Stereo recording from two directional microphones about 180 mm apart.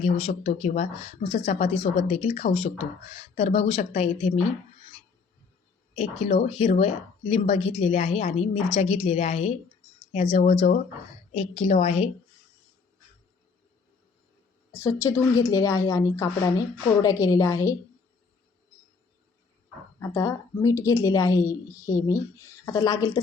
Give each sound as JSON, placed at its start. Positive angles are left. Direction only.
{"t": 0.0, "sound": "speech", "side_deg": 35}
{"t": 5.9, "sound": "speech", "side_deg": 35}
{"t": 14.8, "sound": "a woman's voice", "side_deg": 15}
{"t": 20.0, "sound": "a woman's voice", "side_deg": 20}